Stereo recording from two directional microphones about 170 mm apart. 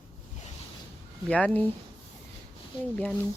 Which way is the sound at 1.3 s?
10° left (ahead or behind).